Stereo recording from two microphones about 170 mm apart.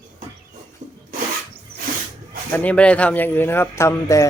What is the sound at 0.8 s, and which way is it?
Rub, 50° right (ahead or behind).